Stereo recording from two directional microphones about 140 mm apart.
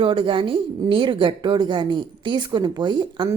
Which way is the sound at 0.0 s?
35° right (ahead or behind).